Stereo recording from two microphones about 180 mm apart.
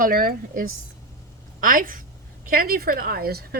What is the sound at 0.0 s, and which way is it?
A woman's voice, 55° right (ahead or behind).